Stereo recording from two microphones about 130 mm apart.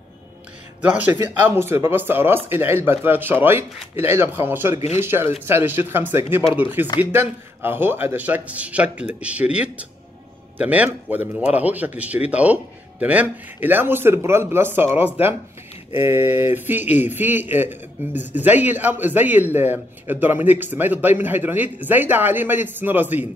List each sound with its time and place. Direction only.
0.8 s a man's voice: 10° right (ahead or behind)